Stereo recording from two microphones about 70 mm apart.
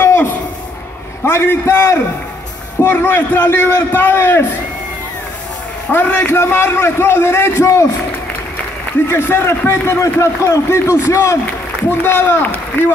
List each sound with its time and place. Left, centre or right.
0.0 s a sound: left
1.2 s a man's voice: left
5.9 s a man's voice: left
9.0 s a man's voice: left
11.9 s a man's voice: left